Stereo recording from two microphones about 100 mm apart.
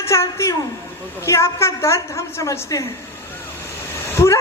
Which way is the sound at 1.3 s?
30° left (ahead or behind).